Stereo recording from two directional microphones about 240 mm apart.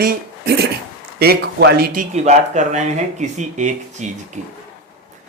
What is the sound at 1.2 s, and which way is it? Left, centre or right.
Speech, right.